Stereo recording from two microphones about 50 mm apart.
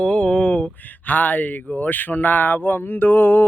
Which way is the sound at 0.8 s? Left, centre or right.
Left.